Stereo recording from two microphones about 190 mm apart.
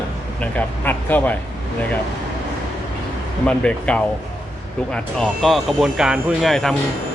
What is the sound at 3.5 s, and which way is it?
Speech, 5° left (ahead or behind).